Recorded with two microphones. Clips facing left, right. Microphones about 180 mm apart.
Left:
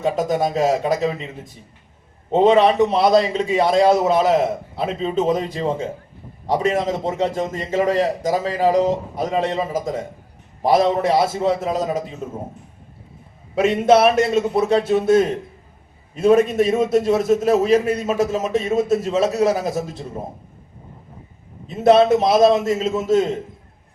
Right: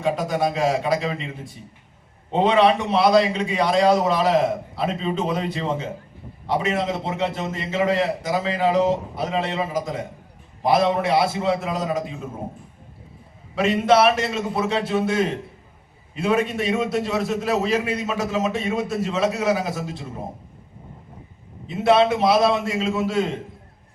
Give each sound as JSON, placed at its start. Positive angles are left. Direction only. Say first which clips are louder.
{"t": 0.0, "sound": "a man's voice", "louder": "left 2 dB", "side_deg": 45}
{"t": 2.3, "sound": "a man's voice", "louder": "left 3 dB", "side_deg": 45}
{"t": 6.8, "sound": "a man's voice", "louder": "left 3 dB", "side_deg": 45}
{"t": 13.6, "sound": "a man's voice", "louder": "left 3 dB", "side_deg": 50}
{"t": 21.8, "sound": "a man's voice", "louder": "left 4 dB", "side_deg": 45}